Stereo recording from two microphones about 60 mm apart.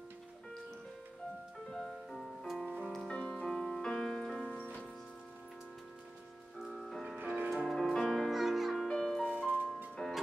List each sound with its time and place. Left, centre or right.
1.7 s music: centre
3.1 s music: centre
6.6 s music: centre
8.8 s music: centre
9.4 s music: right
10.0 s music: centre